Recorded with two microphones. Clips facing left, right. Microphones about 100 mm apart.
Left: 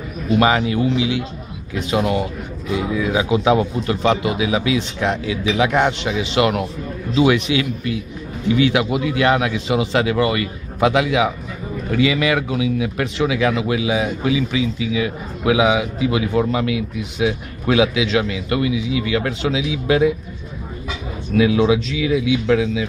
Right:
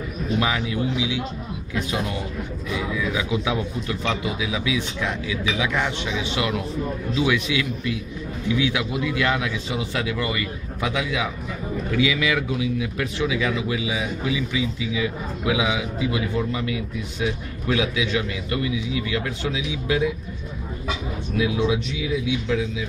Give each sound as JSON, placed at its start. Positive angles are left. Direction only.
{"t": 0.4, "sound": "speech", "side_deg": 60}
{"t": 2.7, "sound": "speech", "side_deg": 45}
{"t": 11.9, "sound": "speech", "side_deg": 55}
{"t": 21.4, "sound": "speech", "side_deg": 85}